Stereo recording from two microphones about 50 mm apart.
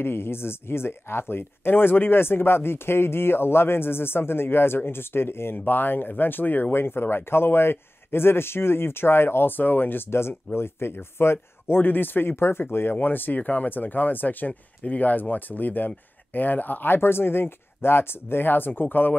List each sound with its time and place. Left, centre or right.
0.0 s speech: left
9.6 s speech: left
10.1 s speech: left
11.8 s speech: left
13.0 s speech: left